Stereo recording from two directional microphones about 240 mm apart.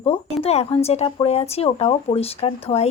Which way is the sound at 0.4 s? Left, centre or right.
Left.